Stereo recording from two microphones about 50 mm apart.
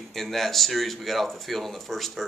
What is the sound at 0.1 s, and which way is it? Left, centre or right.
Speech, centre.